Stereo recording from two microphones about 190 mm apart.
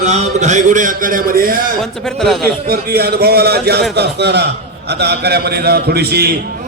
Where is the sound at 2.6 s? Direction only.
50° right (ahead or behind).